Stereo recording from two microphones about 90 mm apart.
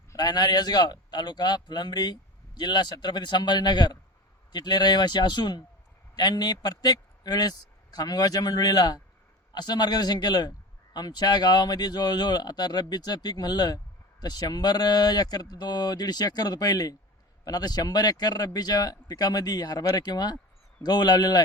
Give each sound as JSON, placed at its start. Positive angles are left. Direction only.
{"t": 0.2, "sound": "a man's voice", "side_deg": 50}